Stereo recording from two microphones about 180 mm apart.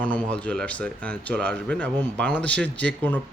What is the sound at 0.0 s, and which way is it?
Speech, 5° left (ahead or behind).